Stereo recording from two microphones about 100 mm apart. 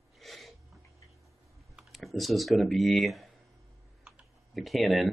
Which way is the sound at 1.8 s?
Centre (ahead or behind).